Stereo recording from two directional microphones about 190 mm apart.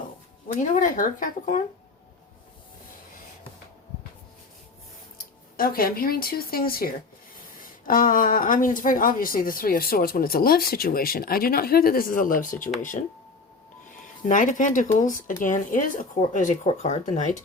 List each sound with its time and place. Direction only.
0.4 s speech: 45° left (ahead or behind)
5.1 s speech: 50° left (ahead or behind)
14.3 s speech: 45° left (ahead or behind)